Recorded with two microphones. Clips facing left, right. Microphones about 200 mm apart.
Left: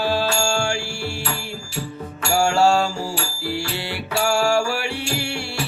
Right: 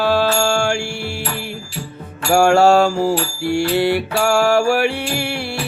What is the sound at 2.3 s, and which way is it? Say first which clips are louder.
Music: right 6 dB; 60° right (ahead or behind).